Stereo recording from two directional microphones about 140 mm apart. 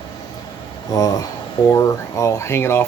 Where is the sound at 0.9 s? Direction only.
25° left (ahead or behind).